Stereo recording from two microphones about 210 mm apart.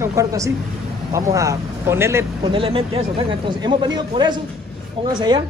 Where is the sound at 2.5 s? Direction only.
25° right (ahead or behind).